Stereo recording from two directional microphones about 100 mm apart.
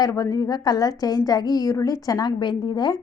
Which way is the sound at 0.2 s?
35° left (ahead or behind).